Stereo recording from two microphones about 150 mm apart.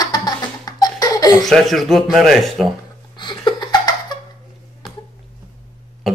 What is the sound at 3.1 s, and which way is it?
Laughter, 30° left (ahead or behind).